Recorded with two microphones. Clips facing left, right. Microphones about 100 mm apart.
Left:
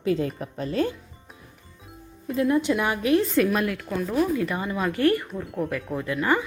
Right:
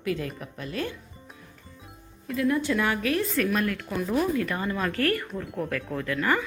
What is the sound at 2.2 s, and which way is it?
Speech, 25° left (ahead or behind).